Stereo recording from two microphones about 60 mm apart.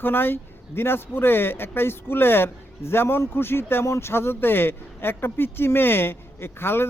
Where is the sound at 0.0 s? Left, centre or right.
Left.